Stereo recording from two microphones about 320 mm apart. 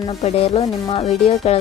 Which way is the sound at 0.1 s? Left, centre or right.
Centre.